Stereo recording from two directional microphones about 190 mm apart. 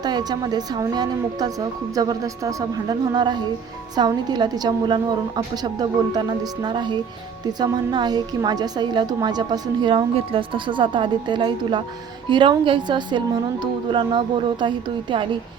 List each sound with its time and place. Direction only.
0.0 s a woman's voice: 20° right (ahead or behind)